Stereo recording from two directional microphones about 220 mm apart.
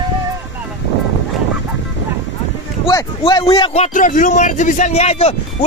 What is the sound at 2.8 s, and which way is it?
A man's voice, 20° left (ahead or behind).